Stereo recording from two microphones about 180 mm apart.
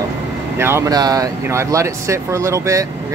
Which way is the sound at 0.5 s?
15° right (ahead or behind).